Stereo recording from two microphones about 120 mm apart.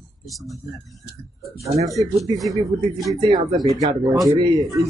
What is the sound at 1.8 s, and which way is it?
A man's voice, 25° right (ahead or behind).